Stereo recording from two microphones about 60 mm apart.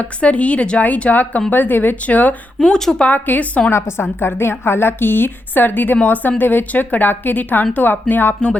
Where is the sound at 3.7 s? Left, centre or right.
Left.